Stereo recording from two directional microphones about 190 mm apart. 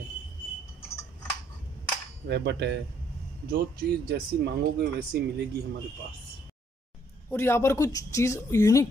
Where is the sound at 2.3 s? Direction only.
65° right (ahead or behind).